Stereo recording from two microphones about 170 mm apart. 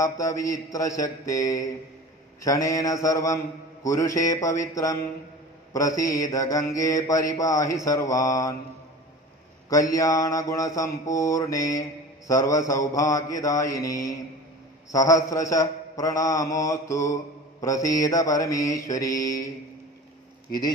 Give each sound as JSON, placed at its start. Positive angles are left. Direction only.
{"t": 0.0, "sound": "a man's voice", "side_deg": 20}
{"t": 9.7, "sound": "a man's voice", "side_deg": 20}